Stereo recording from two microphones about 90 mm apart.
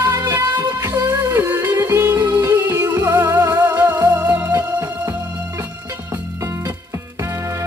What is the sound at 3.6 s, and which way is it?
Music, 20° right (ahead or behind).